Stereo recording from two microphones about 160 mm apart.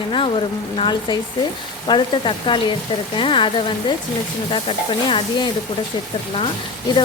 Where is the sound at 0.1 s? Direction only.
35° left (ahead or behind).